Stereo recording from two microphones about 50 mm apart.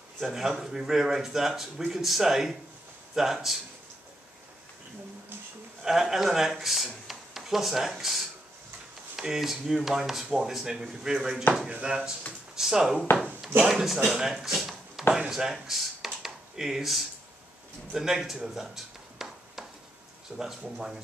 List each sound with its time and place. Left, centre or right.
0.3 s speech: centre
5.8 s speech: centre
12.5 s speech: centre
19.2 s a sound: centre
20.3 s speech: centre